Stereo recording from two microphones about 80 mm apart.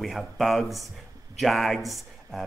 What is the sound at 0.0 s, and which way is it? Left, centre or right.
Speech, centre.